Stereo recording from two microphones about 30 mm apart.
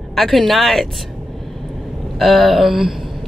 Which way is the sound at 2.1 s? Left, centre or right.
Centre.